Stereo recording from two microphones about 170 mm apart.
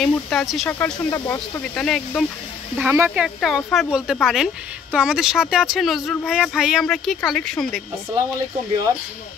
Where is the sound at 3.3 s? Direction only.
Centre (ahead or behind).